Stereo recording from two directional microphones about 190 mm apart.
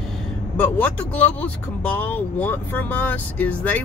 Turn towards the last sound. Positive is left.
turn(degrees=10)  # may be behind; listen again after turning